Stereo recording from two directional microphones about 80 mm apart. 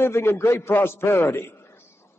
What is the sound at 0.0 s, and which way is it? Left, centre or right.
A man's voice, left.